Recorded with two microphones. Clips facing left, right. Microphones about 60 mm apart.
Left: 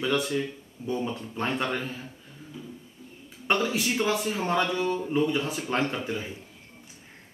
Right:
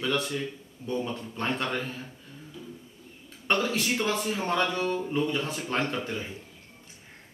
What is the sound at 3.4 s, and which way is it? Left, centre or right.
Speech, centre.